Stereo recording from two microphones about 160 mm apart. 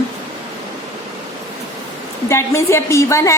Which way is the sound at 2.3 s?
15° left (ahead or behind).